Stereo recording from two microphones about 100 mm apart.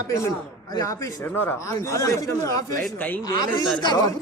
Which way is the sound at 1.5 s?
30° left (ahead or behind).